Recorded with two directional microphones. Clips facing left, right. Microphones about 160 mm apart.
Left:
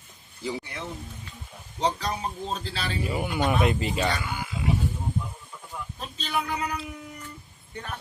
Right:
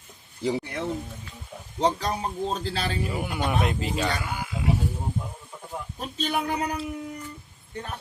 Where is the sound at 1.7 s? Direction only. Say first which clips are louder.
Right 3 dB; 50° right (ahead or behind).